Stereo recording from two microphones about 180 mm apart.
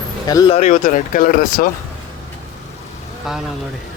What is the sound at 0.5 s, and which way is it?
Speech, 40° left (ahead or behind).